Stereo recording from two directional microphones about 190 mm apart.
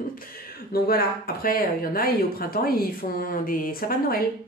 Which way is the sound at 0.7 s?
55° left (ahead or behind).